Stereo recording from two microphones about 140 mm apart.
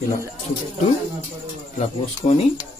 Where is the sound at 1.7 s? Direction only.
50° left (ahead or behind).